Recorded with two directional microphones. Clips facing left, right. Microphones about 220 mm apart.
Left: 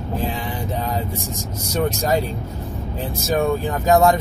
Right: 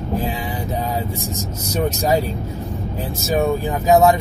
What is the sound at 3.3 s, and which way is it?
Speech, 5° right (ahead or behind).